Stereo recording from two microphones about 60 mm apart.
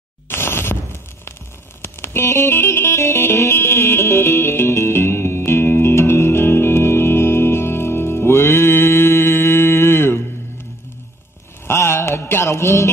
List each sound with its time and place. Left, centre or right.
0.3 s a sound: left
1.8 s music: left
11.6 s mantra: left